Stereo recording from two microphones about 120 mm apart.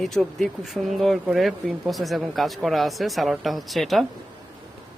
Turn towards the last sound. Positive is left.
turn(degrees=0)  # may be behind; listen again after turning